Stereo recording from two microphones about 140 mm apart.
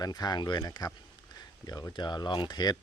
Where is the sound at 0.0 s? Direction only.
30° left (ahead or behind).